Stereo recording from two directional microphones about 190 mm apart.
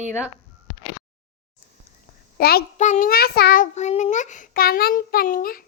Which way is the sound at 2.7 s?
40° left (ahead or behind).